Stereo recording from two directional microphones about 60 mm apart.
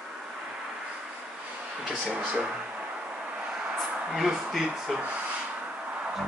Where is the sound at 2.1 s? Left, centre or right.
Right.